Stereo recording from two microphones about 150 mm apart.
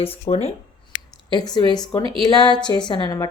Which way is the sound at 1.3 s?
30° left (ahead or behind).